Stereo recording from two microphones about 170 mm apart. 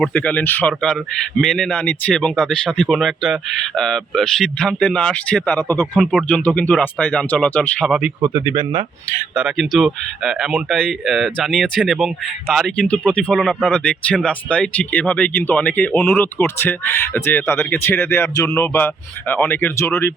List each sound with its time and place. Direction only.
0.0 s speech: 5° left (ahead or behind)
6.0 s speech: centre (ahead or behind)
8.2 s speech: 15° right (ahead or behind)
9.3 s speech: centre (ahead or behind); by 19.9 s 15° left (ahead or behind)